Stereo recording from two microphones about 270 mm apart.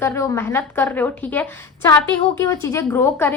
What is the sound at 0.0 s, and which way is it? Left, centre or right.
Speech, centre.